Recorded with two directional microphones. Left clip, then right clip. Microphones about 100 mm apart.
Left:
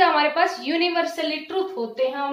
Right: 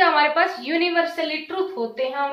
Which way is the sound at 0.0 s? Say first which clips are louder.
Right 1 dB; 30° left (ahead or behind).